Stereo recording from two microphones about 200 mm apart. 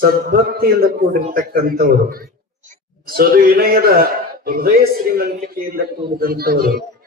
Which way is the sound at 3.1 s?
50° right (ahead or behind).